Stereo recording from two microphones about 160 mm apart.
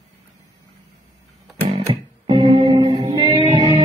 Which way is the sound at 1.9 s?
30° right (ahead or behind).